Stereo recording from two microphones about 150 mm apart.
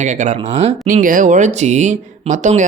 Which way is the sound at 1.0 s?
60° right (ahead or behind).